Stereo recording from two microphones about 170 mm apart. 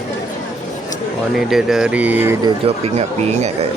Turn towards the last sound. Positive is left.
turn(degrees=-35)  # may be behind; listen again after turning